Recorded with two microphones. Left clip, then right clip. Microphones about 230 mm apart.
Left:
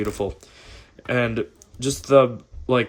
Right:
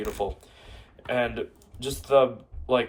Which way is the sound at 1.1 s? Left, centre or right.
Left.